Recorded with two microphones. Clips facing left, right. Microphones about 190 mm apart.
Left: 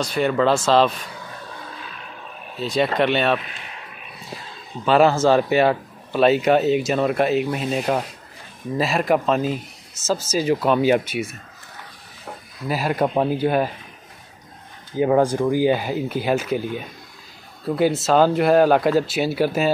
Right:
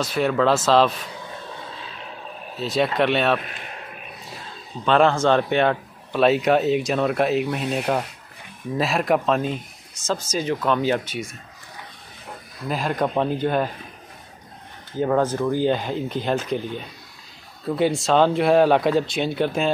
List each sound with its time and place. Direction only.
0.0 s speech: centre (ahead or behind)
2.5 s speech: centre (ahead or behind)
3.3 s a man's voice: 50° right (ahead or behind)
4.8 s speech: 5° left (ahead or behind)
12.6 s speech: 5° left (ahead or behind)
15.0 s speech: 10° left (ahead or behind)